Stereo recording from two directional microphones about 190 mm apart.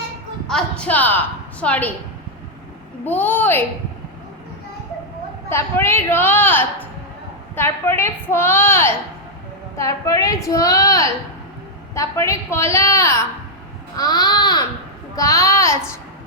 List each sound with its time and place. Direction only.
0.4 s a woman's voice: 5° left (ahead or behind)
3.0 s a woman's voice: 10° left (ahead or behind)
5.5 s a woman's voice: 15° left (ahead or behind)
13.9 s babbling: 20° left (ahead or behind)
15.1 s a woman's voice: 15° left (ahead or behind)